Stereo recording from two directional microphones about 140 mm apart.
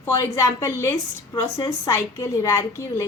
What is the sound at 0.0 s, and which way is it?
A woman's voice, 20° left (ahead or behind).